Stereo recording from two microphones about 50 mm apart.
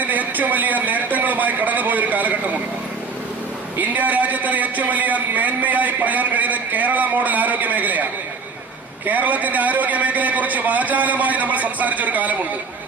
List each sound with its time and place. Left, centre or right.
0.0 s a sound: right
3.8 s a man's voice: right
9.0 s a man's voice: right